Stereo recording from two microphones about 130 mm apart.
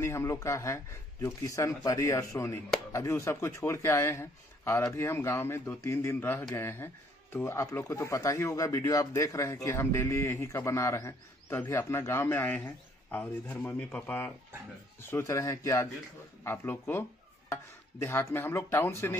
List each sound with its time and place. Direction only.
0.0 s a man's voice: 20° left (ahead or behind)